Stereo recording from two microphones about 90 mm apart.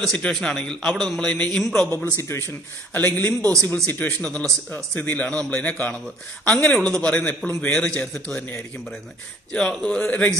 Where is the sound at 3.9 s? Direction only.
20° left (ahead or behind).